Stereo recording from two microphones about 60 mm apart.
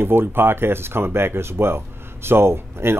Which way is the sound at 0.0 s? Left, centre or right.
Right.